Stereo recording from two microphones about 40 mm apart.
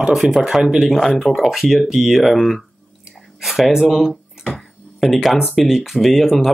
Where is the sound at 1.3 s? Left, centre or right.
Centre.